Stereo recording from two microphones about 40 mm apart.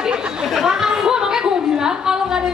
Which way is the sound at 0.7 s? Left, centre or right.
Centre.